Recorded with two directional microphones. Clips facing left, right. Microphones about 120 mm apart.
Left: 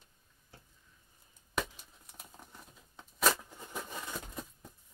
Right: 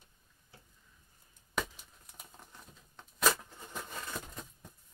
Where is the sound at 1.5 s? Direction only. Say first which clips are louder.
Even; centre (ahead or behind).